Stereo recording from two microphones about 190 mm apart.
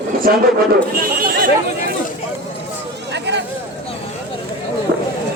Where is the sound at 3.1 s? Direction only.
65° right (ahead or behind).